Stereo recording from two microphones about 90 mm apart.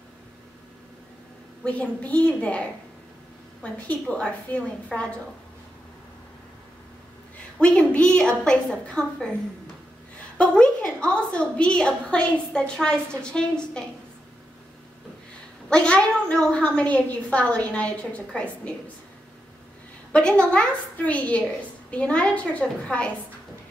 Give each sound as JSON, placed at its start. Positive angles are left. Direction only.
{"t": 1.6, "sound": "a woman's voice", "side_deg": 15}
{"t": 7.6, "sound": "a woman's voice", "side_deg": 10}
{"t": 10.3, "sound": "a woman's voice", "side_deg": 10}
{"t": 15.7, "sound": "a woman's voice", "side_deg": 10}
{"t": 20.1, "sound": "a woman's voice", "side_deg": 10}